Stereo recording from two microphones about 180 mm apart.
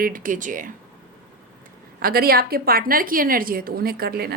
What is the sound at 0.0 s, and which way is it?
Speech, 50° right (ahead or behind).